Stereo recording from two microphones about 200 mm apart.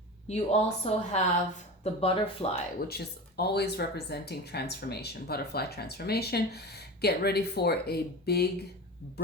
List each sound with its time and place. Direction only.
0.3 s a woman's voice: 30° left (ahead or behind)
2.7 s speech: 50° left (ahead or behind)